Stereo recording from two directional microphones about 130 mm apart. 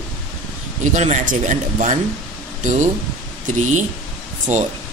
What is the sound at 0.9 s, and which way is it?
Speech, 70° right (ahead or behind).